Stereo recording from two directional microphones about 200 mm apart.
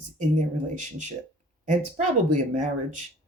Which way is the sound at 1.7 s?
35° right (ahead or behind).